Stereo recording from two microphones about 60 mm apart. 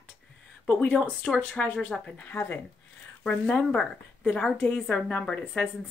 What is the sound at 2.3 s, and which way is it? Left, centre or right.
Speech, left.